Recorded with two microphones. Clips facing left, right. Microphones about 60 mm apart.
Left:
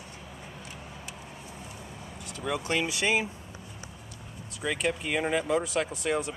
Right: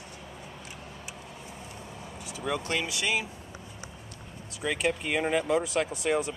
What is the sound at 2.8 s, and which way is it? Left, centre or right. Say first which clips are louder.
Speech: left 3 dB; left.